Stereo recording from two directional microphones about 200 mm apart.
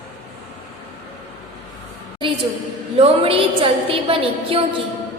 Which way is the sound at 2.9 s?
30° right (ahead or behind).